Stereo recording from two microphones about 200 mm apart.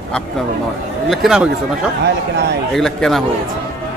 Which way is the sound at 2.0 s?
55° right (ahead or behind).